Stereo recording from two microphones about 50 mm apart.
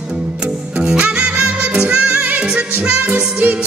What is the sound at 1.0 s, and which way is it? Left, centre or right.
Music, right.